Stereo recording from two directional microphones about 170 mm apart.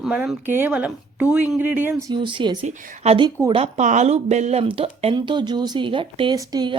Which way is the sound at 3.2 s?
15° right (ahead or behind).